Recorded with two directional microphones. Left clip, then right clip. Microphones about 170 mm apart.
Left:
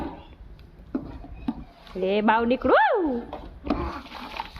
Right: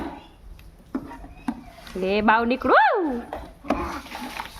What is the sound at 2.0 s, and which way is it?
Speech, 10° right (ahead or behind).